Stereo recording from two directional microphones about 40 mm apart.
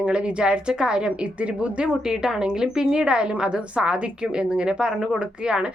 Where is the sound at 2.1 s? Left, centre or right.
Centre.